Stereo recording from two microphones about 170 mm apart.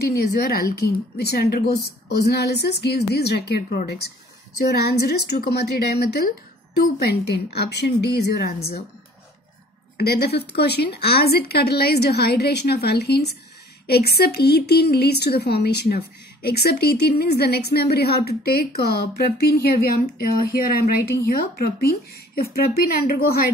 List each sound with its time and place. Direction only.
0.0 s a woman's voice: 65° left (ahead or behind)
9.9 s a woman's voice: 70° left (ahead or behind)
21.3 s speech: 60° left (ahead or behind)